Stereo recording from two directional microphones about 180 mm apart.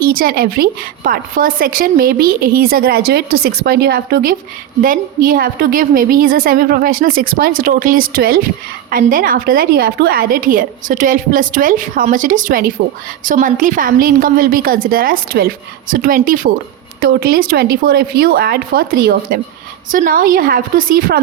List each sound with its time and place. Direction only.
0.0 s a woman's voice: 55° right (ahead or behind)